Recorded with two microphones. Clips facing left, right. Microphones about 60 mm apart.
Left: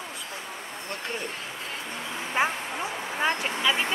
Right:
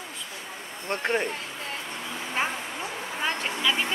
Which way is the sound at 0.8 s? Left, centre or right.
Right.